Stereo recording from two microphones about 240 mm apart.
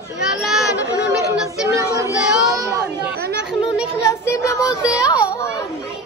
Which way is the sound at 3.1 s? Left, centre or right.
Right.